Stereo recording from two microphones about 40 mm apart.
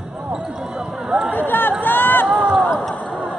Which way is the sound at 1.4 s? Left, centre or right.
Left.